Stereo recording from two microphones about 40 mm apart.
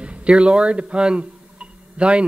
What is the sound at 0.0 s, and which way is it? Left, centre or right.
A man's voice, right.